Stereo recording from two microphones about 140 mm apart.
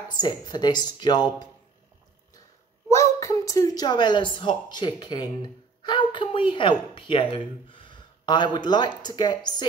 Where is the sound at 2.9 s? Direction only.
20° left (ahead or behind).